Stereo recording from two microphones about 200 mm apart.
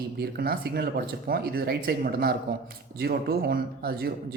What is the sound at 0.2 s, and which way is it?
Speech, 50° right (ahead or behind).